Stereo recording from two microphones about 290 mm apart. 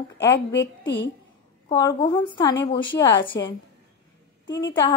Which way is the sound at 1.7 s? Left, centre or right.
Centre.